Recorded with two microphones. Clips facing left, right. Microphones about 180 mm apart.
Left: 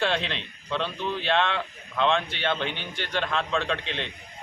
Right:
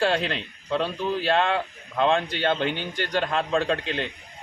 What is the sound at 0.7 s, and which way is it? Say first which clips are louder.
A man's voice: right 4 dB; 35° right (ahead or behind).